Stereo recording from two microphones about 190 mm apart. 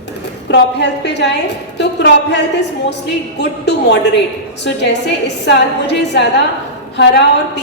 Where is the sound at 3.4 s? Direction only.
65° left (ahead or behind).